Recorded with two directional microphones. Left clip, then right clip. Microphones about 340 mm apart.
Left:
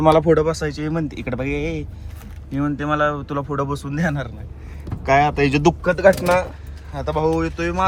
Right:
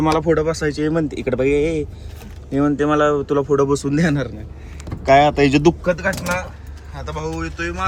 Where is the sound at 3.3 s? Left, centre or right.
Left.